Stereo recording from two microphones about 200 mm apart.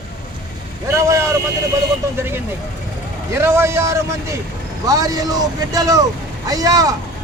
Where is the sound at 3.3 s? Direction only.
15° right (ahead or behind).